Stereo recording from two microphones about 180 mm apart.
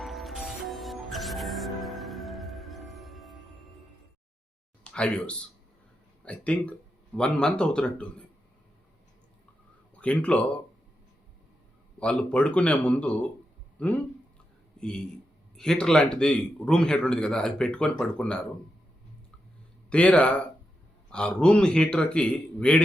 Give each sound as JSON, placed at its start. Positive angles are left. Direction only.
{"t": 0.0, "sound": "music", "side_deg": 0}
{"t": 4.8, "sound": "a man's voice", "side_deg": 5}
{"t": 9.9, "sound": "speech", "side_deg": 5}
{"t": 11.9, "sound": "a man's voice", "side_deg": 5}
{"t": 19.9, "sound": "a man's voice", "side_deg": 5}